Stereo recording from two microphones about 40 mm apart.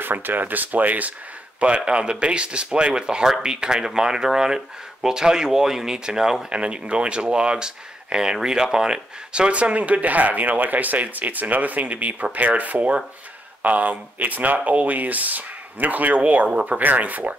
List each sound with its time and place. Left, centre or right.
0.0 s speech: right
1.8 s speech: right
6.5 s speech: right